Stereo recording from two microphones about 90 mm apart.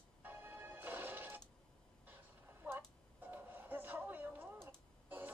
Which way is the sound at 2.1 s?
20° right (ahead or behind).